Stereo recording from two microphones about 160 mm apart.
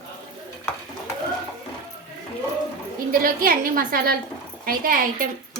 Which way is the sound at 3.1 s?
65° right (ahead or behind).